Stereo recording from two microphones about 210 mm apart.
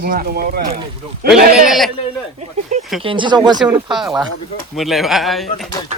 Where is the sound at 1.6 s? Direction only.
Centre (ahead or behind).